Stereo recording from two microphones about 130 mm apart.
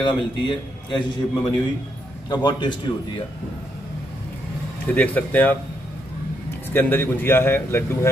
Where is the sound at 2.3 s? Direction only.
35° left (ahead or behind).